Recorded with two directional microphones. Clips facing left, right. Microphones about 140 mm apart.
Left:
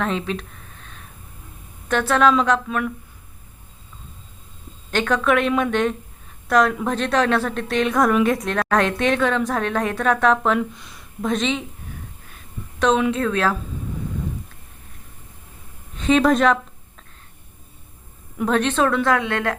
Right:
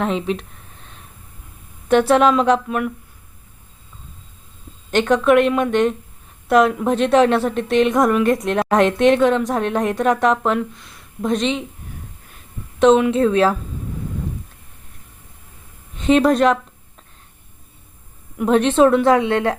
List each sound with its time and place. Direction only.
0.0 s a woman's voice: 15° right (ahead or behind)
1.9 s speech: 25° right (ahead or behind)
2.6 s a woman's voice: 10° right (ahead or behind)
4.9 s speech: 20° right (ahead or behind)
5.2 s a woman's voice: 5° right (ahead or behind)
7.3 s speech: 20° right (ahead or behind)
8.0 s speech: centre (ahead or behind)
8.5 s a woman's voice: 20° right (ahead or behind)
10.4 s speech: centre (ahead or behind)
11.2 s a woman's voice: 10° right (ahead or behind)
13.1 s speech: 25° right (ahead or behind)
16.0 s speech: 5° right (ahead or behind)
18.4 s speech: 20° right (ahead or behind)